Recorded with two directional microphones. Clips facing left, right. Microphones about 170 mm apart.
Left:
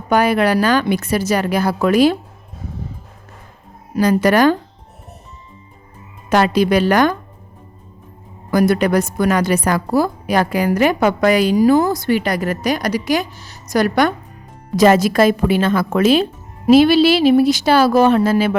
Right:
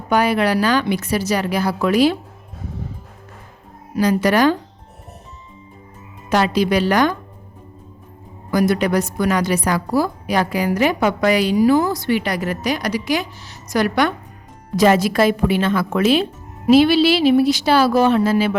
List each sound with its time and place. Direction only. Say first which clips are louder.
0.1 s a woman's voice: left 2 dB; 50° left (ahead or behind)
3.9 s a woman's voice: left 2 dB; 50° left (ahead or behind)
6.3 s a woman's voice: left 3 dB; 50° left (ahead or behind)
8.5 s a woman's voice: left 3 dB; 50° left (ahead or behind)